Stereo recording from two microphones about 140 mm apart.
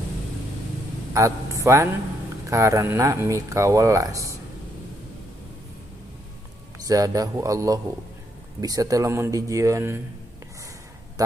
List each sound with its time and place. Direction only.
1.1 s a man's voice: 20° right (ahead or behind)
6.8 s speech: 25° right (ahead or behind)
11.2 s speech: 25° right (ahead or behind)